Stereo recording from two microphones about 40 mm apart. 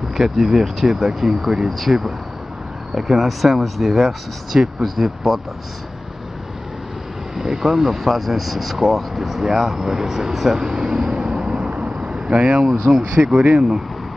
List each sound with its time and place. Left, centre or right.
0.2 s speech: centre
7.3 s speech: centre